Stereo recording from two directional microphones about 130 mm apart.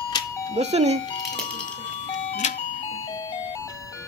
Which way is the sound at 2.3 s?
65° left (ahead or behind).